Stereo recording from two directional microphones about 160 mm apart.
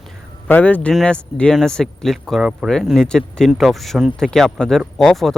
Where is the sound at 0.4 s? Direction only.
10° left (ahead or behind).